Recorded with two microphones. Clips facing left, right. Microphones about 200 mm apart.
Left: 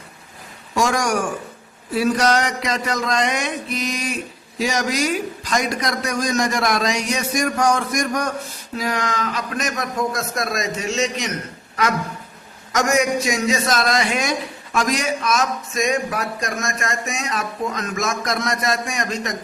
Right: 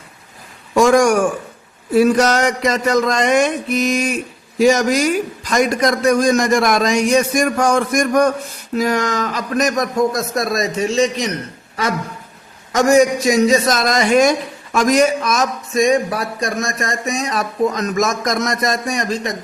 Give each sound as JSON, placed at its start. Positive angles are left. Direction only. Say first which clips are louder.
{"t": 0.8, "sound": "a sound", "louder": "right 8 dB", "side_deg": -55}
{"t": 8.8, "sound": "speech", "louder": "right 6 dB", "side_deg": -45}
{"t": 12.7, "sound": "speech", "louder": "right 6 dB", "side_deg": -30}